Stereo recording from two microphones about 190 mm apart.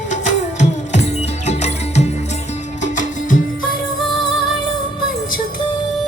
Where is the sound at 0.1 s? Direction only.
40° left (ahead or behind).